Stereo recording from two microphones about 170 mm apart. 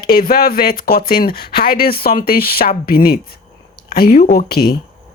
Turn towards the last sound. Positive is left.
turn(degrees=65)  # may be behind; listen again after turning